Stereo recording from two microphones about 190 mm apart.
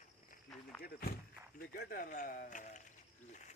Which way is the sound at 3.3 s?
40° left (ahead or behind).